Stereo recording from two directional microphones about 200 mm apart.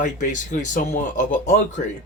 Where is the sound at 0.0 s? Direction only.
40° left (ahead or behind).